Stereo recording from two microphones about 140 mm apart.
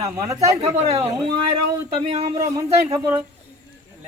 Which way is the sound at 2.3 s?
25° right (ahead or behind).